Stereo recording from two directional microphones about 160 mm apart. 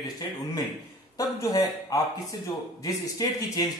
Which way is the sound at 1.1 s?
20° left (ahead or behind).